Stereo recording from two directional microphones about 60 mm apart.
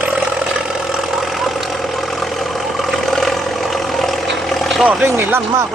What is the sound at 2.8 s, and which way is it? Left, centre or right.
Vehicle, centre.